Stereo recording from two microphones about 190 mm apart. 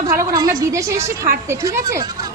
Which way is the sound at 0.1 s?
20° right (ahead or behind).